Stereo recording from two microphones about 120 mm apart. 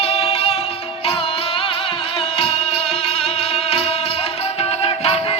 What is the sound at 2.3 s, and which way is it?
Music, 55° left (ahead or behind).